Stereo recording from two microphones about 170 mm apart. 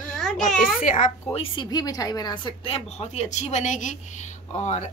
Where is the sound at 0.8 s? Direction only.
45° left (ahead or behind).